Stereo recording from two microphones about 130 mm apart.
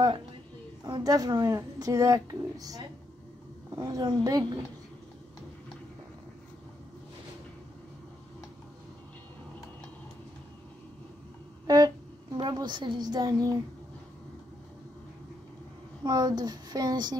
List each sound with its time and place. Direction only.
0.8 s speech: 30° right (ahead or behind)
11.6 s a sound: 30° right (ahead or behind)
12.4 s a woman's voice: 35° right (ahead or behind)
16.0 s speech: 30° right (ahead or behind)